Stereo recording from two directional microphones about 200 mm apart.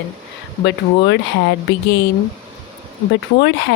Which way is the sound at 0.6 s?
60° left (ahead or behind).